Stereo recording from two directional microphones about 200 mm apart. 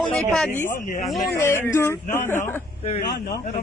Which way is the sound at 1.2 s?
10° left (ahead or behind).